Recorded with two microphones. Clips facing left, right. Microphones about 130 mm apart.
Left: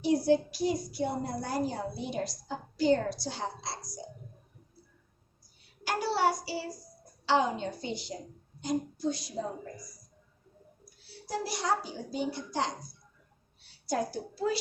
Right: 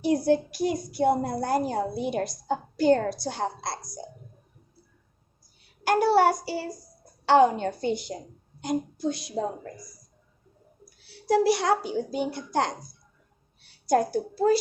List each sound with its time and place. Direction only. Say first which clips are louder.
0.3 s a woman's voice: right 3 dB; 55° right (ahead or behind)
5.8 s a child's voice: right 8 dB; 55° right (ahead or behind)
10.8 s a child's voice: right 17 dB; 70° right (ahead or behind); by 14.6 s 45° right (ahead or behind)